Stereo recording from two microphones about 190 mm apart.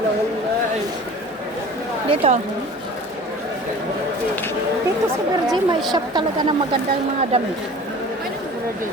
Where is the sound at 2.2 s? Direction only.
30° right (ahead or behind).